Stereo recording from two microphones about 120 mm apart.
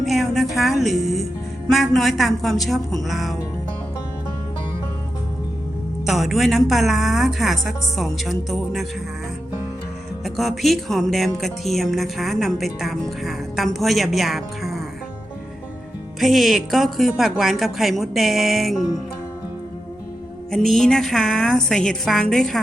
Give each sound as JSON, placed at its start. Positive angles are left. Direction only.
{"t": 0.0, "sound": "a woman's voice", "side_deg": 0}
{"t": 6.1, "sound": "a woman's voice", "side_deg": 0}
{"t": 10.2, "sound": "a woman's voice", "side_deg": 0}
{"t": 16.2, "sound": "a woman's voice", "side_deg": 0}
{"t": 20.5, "sound": "a woman's voice", "side_deg": 5}